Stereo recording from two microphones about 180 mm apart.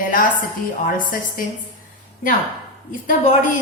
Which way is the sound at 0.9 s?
50° left (ahead or behind).